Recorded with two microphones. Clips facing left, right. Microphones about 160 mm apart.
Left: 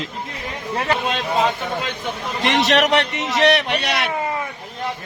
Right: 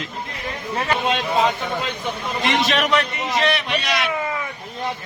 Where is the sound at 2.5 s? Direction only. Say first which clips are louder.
Left 3 dB; 75° left (ahead or behind).